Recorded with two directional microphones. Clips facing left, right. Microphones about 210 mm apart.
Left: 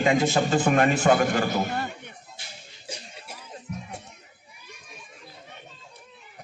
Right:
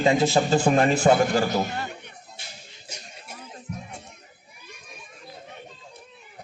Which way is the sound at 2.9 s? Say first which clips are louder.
Left 3 dB; 30° left (ahead or behind).